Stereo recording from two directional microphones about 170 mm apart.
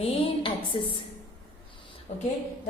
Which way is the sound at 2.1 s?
45° left (ahead or behind).